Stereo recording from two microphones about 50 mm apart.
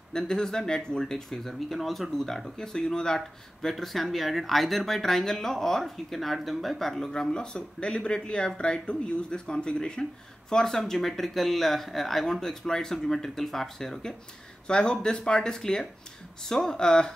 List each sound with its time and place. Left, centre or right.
0.1 s speech: centre
1.5 s speech: centre
3.2 s speech: centre